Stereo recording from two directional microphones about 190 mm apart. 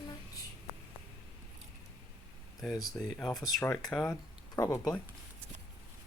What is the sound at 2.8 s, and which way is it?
Speech, centre (ahead or behind).